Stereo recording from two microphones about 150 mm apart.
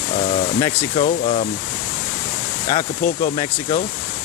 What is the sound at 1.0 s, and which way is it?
Speech, 45° left (ahead or behind).